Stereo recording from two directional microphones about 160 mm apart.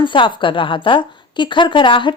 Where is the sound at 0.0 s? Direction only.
30° left (ahead or behind).